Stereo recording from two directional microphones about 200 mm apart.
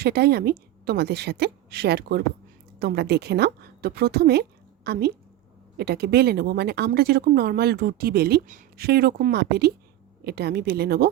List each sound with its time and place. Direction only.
0.0 s a woman's voice: 50° right (ahead or behind)